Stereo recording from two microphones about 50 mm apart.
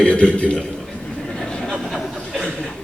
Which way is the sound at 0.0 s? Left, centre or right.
Left.